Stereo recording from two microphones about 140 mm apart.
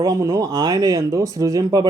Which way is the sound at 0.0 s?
25° right (ahead or behind).